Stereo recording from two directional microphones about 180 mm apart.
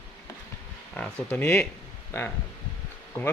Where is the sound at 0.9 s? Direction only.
10° left (ahead or behind).